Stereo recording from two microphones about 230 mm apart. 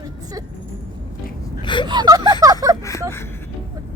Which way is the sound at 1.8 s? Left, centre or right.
Centre.